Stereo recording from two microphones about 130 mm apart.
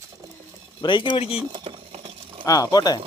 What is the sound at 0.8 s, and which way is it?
Speech, 35° left (ahead or behind).